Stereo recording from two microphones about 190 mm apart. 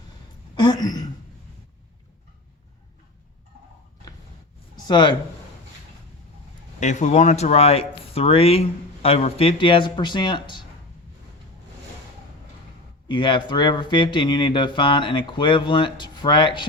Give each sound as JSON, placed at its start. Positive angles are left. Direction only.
{"t": 0.5, "sound": "speech", "side_deg": 20}
{"t": 4.9, "sound": "speech", "side_deg": 20}
{"t": 6.7, "sound": "speech", "side_deg": 40}
{"t": 13.1, "sound": "speech", "side_deg": 25}